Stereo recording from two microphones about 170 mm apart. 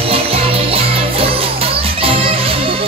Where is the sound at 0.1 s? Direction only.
35° right (ahead or behind).